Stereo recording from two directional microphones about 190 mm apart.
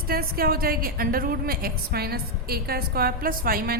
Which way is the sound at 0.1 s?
50° right (ahead or behind).